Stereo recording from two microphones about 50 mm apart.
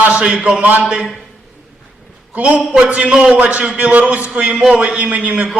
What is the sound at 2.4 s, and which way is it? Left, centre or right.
A man's voice, right.